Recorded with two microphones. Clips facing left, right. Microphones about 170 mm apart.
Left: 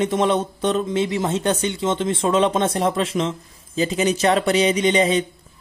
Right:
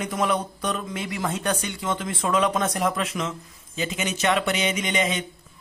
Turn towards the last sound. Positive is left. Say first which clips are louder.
# left 8 dB
turn(degrees=35)  # may be behind; listen again after turning